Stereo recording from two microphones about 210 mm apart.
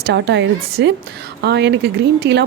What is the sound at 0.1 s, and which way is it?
A woman's voice, 55° right (ahead or behind).